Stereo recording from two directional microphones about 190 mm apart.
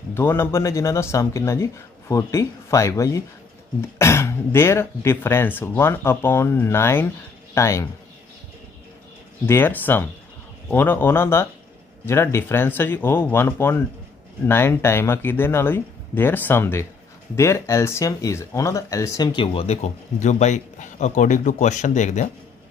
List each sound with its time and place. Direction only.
0.1 s speech: 10° left (ahead or behind)
9.5 s speech: 10° left (ahead or behind); by 22.3 s 40° left (ahead or behind)